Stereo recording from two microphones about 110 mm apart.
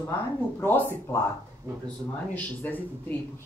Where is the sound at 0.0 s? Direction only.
20° left (ahead or behind).